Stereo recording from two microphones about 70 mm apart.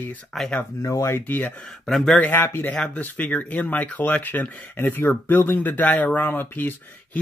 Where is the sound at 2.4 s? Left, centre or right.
Left.